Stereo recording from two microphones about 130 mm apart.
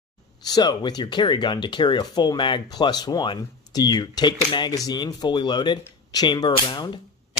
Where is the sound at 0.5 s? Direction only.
30° left (ahead or behind).